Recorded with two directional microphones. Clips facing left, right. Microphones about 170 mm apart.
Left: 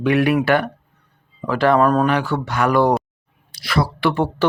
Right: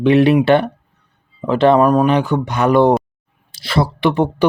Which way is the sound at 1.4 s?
20° right (ahead or behind).